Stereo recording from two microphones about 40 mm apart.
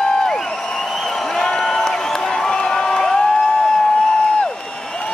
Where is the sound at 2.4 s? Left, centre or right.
Centre.